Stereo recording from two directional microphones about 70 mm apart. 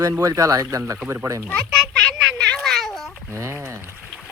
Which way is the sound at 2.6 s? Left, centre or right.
Centre.